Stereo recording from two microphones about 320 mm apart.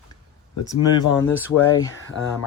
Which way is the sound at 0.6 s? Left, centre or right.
Centre.